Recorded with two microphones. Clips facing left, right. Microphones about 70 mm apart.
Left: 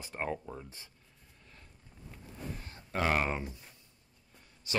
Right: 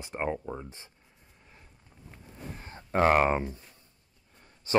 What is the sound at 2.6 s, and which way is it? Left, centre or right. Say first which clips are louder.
Speech: right 9 dB; right.